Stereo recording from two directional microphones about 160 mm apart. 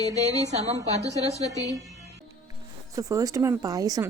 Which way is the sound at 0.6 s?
20° left (ahead or behind).